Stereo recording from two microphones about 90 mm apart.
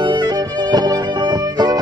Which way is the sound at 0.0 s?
50° right (ahead or behind).